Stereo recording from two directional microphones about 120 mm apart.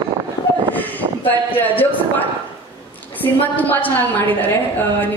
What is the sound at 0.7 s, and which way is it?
Speech, 15° left (ahead or behind).